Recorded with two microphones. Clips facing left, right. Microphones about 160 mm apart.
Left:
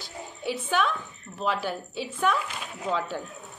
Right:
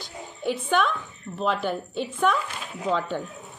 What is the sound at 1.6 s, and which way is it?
Speech, 55° right (ahead or behind).